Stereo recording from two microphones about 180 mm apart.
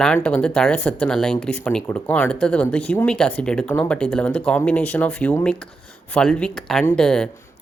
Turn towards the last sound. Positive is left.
turn(degrees=5)  # may be behind; listen again after turning